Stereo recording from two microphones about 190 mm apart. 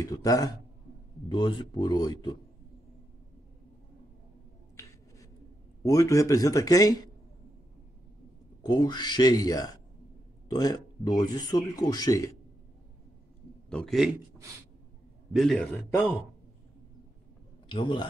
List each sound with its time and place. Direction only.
0.0 s speech: 20° left (ahead or behind)
5.8 s speech: 15° left (ahead or behind)
8.6 s speech: 20° left (ahead or behind)
13.7 s a man's voice: 5° left (ahead or behind)
15.3 s a man's voice: centre (ahead or behind)
17.6 s speech: 25° left (ahead or behind)